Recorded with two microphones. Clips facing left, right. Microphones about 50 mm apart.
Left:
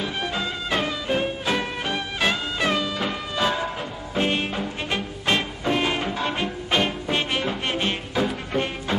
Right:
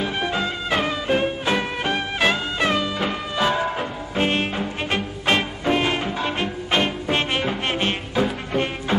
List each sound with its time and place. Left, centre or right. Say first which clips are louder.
0.0 s music: right 3 dB; centre